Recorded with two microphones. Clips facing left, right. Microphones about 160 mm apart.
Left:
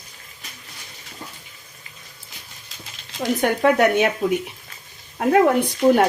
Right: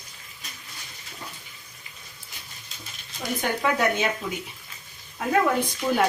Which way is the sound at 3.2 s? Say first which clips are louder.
Left 7 dB; 65° left (ahead or behind).